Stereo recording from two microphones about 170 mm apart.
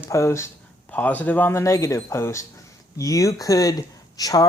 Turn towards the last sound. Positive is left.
turn(degrees=20)  # may be behind; listen again after turning